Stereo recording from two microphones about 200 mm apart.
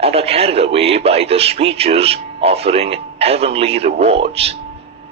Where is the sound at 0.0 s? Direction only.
30° right (ahead or behind).